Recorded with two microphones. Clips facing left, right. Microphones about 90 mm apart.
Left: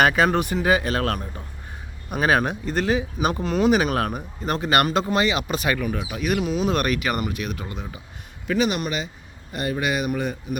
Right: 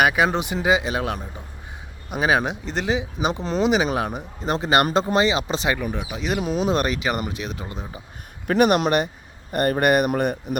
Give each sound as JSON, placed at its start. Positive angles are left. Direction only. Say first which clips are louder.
{"t": 0.0, "sound": "speech", "louder": "left 1 dB", "side_deg": -10}
{"t": 3.4, "sound": "speech", "louder": "left 1 dB", "side_deg": -30}
{"t": 3.7, "sound": "speech", "louder": "left 2 dB", "side_deg": -15}
{"t": 4.5, "sound": "speech", "louder": "right 1 dB", "side_deg": -25}
{"t": 6.4, "sound": "speech", "louder": "right 4 dB", "side_deg": -40}
{"t": 8.4, "sound": "speech", "louder": "right 5 dB", "side_deg": -55}
{"t": 10.1, "sound": "speech", "louder": "right 3 dB", "side_deg": -65}